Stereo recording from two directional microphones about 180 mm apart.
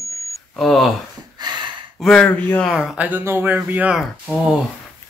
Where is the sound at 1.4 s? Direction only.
25° right (ahead or behind).